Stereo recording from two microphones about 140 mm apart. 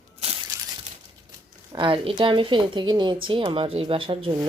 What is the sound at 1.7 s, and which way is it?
A woman's voice, 35° right (ahead or behind).